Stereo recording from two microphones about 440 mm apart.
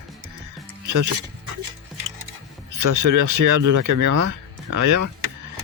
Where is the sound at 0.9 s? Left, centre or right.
Right.